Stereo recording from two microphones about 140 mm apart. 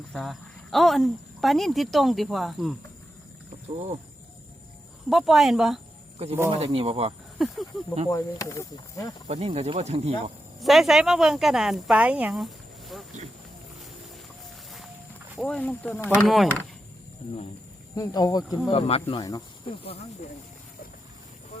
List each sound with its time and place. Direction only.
0.1 s speech: centre (ahead or behind)
5.0 s speech: centre (ahead or behind)
6.5 s speech: 45° right (ahead or behind)
7.3 s speech: centre (ahead or behind)
8.1 s speech: 20° left (ahead or behind)
9.2 s speech: 45° right (ahead or behind)
10.6 s speech: centre (ahead or behind)
15.4 s speech: 5° left (ahead or behind)
16.2 s speech: centre (ahead or behind)
17.9 s speech: 25° left (ahead or behind)
18.7 s speech: 45° left (ahead or behind)
19.2 s speech: 25° left (ahead or behind)